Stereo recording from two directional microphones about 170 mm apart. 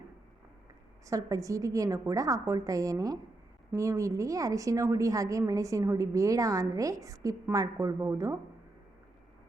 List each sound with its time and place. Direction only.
1.0 s a woman's voice: 20° right (ahead or behind)